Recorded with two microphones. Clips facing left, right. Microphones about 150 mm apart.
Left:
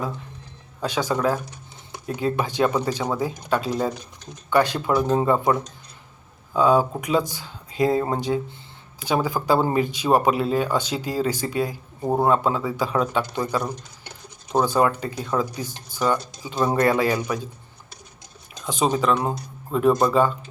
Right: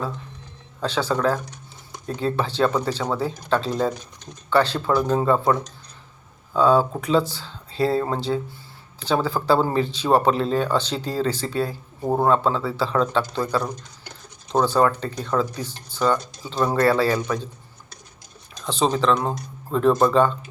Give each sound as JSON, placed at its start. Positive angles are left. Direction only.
{"t": 0.8, "sound": "speech", "side_deg": 10}
{"t": 18.6, "sound": "speech", "side_deg": 10}